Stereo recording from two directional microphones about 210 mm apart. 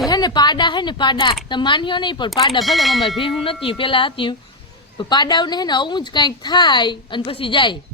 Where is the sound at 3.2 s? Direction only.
25° left (ahead or behind).